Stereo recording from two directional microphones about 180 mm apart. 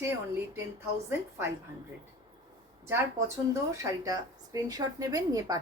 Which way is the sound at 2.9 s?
15° right (ahead or behind).